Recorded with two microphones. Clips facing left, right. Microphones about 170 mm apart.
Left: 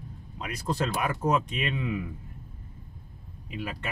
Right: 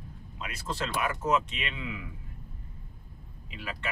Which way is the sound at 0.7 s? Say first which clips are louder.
Left 3 dB; 35° left (ahead or behind).